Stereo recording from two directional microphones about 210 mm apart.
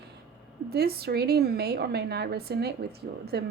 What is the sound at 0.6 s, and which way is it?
A woman's voice, 45° right (ahead or behind).